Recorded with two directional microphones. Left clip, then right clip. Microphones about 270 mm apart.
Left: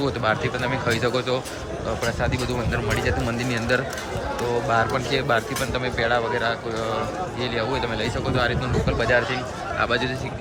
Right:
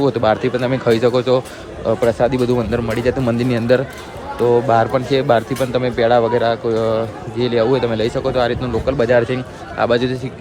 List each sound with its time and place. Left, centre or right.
0.0 s speech: centre